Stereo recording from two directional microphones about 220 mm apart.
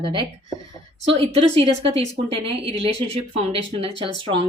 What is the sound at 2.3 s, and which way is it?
Speech, 25° right (ahead or behind).